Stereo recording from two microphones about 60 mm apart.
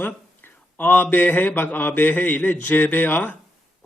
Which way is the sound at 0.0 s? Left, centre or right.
Left.